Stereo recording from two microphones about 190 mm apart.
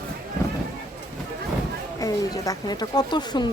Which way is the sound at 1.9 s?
20° left (ahead or behind).